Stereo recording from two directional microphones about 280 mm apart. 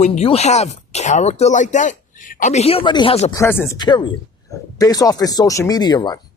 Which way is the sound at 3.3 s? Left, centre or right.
Centre.